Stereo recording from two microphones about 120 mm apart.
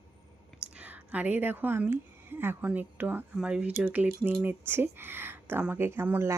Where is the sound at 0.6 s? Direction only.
10° right (ahead or behind).